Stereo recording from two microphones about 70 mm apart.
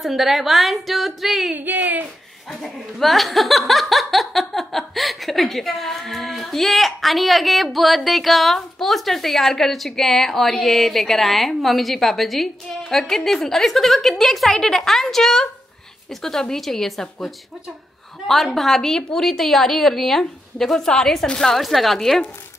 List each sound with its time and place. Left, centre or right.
0.0 s speech: centre
1.5 s a sound: right
2.6 s speech: centre